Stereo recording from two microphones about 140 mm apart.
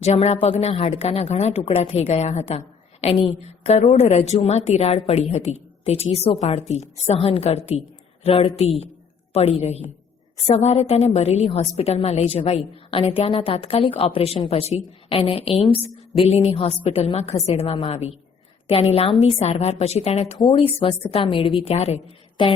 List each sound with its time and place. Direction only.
0.0 s a woman's voice: 50° left (ahead or behind)